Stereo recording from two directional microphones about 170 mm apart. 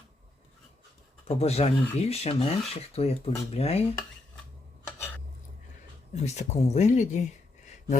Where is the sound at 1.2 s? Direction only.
35° left (ahead or behind).